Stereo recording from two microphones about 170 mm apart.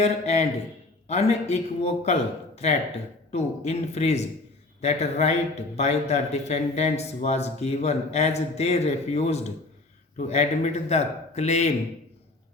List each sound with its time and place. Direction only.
0.0 s speech: 40° left (ahead or behind)